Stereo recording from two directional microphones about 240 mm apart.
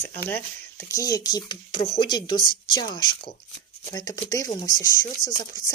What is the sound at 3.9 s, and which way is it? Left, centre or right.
Speech, centre.